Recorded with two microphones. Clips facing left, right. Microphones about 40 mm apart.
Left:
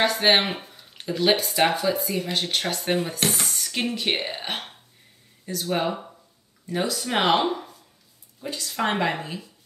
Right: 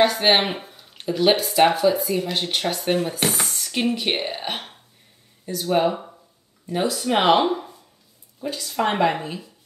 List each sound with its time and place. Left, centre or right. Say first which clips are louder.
0.0 s speech: right 2 dB; centre
8.6 s speech: right 4 dB; centre